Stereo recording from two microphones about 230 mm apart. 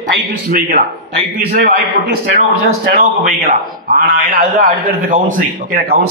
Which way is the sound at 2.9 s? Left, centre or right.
Right.